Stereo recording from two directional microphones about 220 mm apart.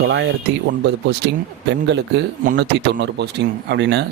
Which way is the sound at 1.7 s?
55° right (ahead or behind).